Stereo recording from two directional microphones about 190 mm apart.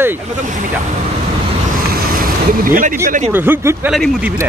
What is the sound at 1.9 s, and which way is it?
Vehicle, 50° right (ahead or behind).